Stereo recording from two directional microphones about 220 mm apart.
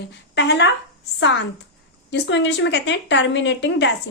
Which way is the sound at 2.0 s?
55° left (ahead or behind).